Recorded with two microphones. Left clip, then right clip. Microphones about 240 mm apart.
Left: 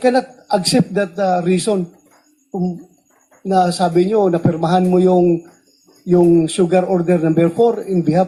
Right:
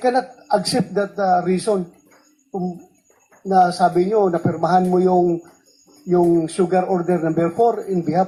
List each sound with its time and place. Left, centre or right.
0.0 s a man's voice: left